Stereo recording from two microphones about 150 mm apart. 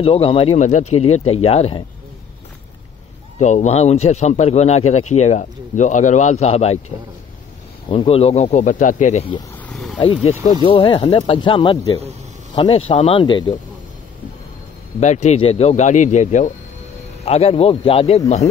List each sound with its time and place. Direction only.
0.0 s speech: 40° left (ahead or behind)
0.6 s a man's voice: 55° left (ahead or behind)
3.3 s a man's voice: 50° left (ahead or behind)
7.9 s a man's voice: 35° left (ahead or behind); by 9.2 s 55° left (ahead or behind)
9.7 s vehicle: centre (ahead or behind)
10.4 s speech: 35° left (ahead or behind)
15.0 s a man's voice: 50° left (ahead or behind)
17.2 s a man's voice: 45° left (ahead or behind)